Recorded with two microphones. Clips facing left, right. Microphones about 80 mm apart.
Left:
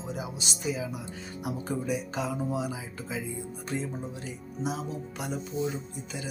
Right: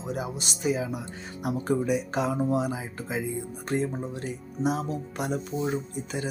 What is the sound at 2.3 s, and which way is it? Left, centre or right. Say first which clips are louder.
Speech: right 5 dB; right.